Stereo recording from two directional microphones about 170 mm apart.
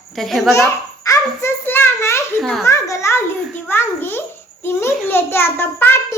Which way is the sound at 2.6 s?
20° left (ahead or behind).